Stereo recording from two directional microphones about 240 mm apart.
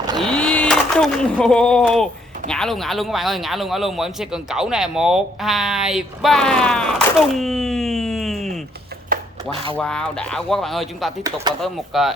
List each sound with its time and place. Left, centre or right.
0.2 s speech: centre
9.1 s a sound: right
9.7 s speech: centre
11.2 s speech: centre
11.6 s speech: centre